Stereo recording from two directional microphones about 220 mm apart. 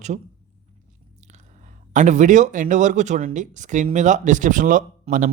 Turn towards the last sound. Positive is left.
turn(degrees=-35)  # may be behind; listen again after turning